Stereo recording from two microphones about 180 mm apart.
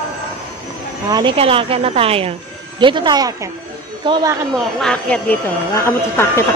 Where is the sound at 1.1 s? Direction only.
30° right (ahead or behind).